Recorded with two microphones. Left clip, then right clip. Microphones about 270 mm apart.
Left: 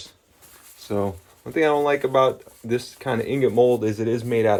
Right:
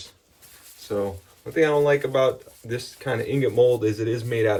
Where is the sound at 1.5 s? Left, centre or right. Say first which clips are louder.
Even; centre.